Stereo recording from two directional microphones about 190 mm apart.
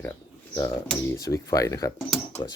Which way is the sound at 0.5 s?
20° left (ahead or behind).